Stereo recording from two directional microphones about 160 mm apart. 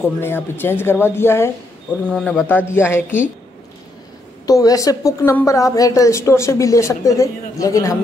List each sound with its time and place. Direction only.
0.2 s speech: 15° left (ahead or behind)
2.0 s speech: 5° left (ahead or behind)
4.5 s a woman's voice: 20° left (ahead or behind)